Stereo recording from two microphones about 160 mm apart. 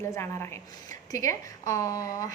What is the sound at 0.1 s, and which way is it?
A woman's voice, 15° left (ahead or behind).